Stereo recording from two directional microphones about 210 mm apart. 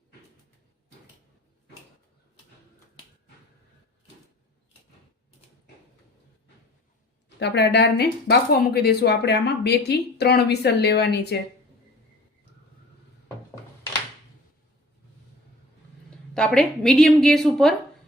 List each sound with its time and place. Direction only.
7.3 s speech: 55° left (ahead or behind)
16.0 s a woman's voice: 5° left (ahead or behind)